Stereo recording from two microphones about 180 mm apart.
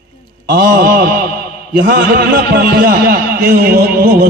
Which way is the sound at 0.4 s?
55° right (ahead or behind).